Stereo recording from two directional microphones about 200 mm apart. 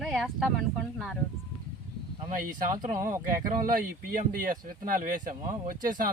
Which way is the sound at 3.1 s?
45° right (ahead or behind).